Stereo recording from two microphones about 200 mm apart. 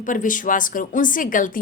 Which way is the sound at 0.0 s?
40° left (ahead or behind).